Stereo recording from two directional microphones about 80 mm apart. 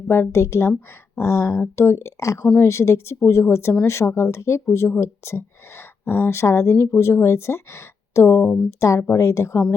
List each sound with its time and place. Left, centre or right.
0.1 s speech: left
8.4 s speech: centre
8.8 s speech: left